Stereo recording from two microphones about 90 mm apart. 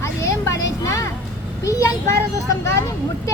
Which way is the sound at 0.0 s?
30° left (ahead or behind).